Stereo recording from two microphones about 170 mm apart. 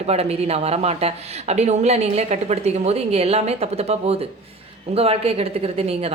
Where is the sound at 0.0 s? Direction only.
40° right (ahead or behind).